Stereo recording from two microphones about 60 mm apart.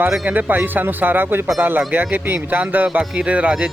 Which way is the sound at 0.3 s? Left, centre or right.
Right.